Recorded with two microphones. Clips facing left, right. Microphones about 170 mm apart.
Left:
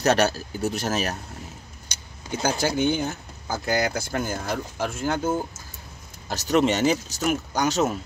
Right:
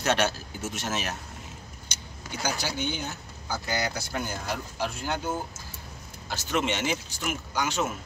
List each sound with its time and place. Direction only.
0.0 s speech: 40° left (ahead or behind)
2.6 s speech: 50° left (ahead or behind)